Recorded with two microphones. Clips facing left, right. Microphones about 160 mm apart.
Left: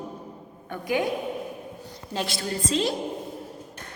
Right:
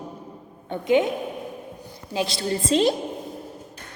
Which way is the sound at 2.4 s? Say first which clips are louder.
Right 6 dB; 30° right (ahead or behind).